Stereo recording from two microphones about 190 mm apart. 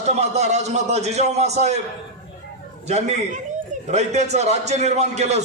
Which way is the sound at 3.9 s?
35° right (ahead or behind).